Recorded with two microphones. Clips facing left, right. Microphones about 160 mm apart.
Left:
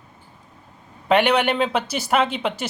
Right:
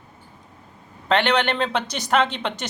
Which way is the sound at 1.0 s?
10° left (ahead or behind).